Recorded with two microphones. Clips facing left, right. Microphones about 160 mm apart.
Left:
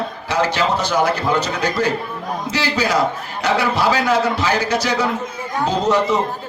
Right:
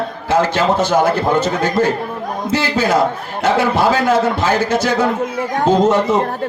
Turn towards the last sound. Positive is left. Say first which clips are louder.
# right 3 dB
turn(degrees=-50)  # may be behind; listen again after turning